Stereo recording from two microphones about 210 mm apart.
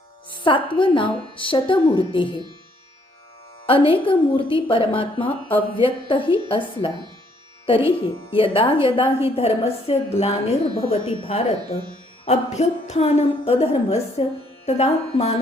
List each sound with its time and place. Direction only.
0.3 s a woman's voice: 25° left (ahead or behind)
3.7 s a woman's voice: 25° left (ahead or behind)